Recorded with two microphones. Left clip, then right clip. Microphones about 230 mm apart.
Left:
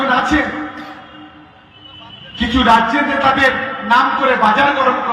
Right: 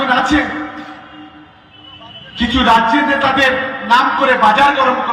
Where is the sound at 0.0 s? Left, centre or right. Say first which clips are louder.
Right 1 dB; right.